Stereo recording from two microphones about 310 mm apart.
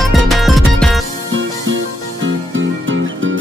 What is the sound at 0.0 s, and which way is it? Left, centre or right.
Music, centre.